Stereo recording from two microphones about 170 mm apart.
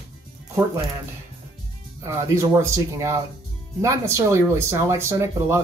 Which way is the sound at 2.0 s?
15° right (ahead or behind).